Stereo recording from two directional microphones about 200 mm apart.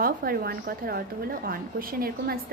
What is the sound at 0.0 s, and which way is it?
A woman's voice, 50° right (ahead or behind).